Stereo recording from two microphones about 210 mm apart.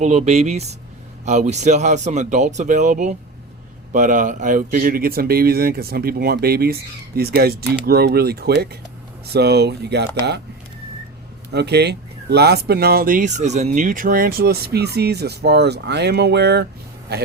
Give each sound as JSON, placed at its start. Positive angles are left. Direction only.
{"t": 0.0, "sound": "speech", "side_deg": -30}
{"t": 11.5, "sound": "speech", "side_deg": -50}